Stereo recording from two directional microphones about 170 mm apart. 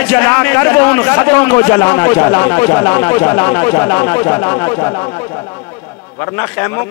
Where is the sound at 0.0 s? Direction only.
15° left (ahead or behind).